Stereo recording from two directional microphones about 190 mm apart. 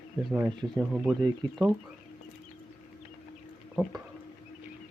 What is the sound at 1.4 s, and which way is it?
Speech, 25° right (ahead or behind).